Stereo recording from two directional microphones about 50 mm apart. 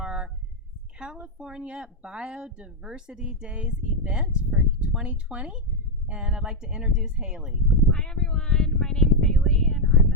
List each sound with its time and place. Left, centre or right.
0.0 s a sound: centre
0.9 s speech: centre
7.9 s speech: centre